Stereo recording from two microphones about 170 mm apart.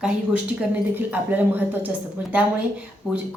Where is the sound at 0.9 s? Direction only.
10° right (ahead or behind).